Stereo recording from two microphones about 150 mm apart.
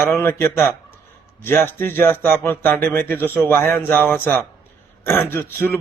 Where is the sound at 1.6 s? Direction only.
15° left (ahead or behind).